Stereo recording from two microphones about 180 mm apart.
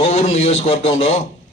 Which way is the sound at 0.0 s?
35° left (ahead or behind).